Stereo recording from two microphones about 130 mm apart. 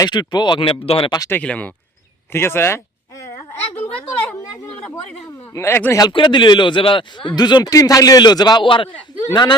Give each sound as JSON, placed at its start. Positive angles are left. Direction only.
{"t": 0.0, "sound": "a man's voice", "side_deg": 30}
{"t": 1.3, "sound": "speech", "side_deg": 10}
{"t": 5.5, "sound": "speech", "side_deg": 15}
{"t": 6.0, "sound": "a man's voice", "side_deg": 35}